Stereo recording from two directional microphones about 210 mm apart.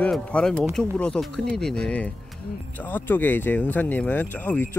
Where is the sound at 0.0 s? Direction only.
5° left (ahead or behind).